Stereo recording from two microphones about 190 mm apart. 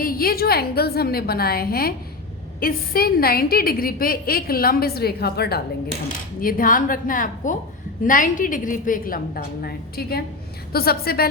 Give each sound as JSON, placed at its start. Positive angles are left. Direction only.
{"t": 0.0, "sound": "a woman's voice", "side_deg": 50}